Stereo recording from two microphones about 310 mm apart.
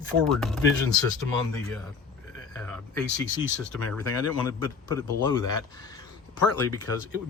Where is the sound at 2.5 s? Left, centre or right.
Centre.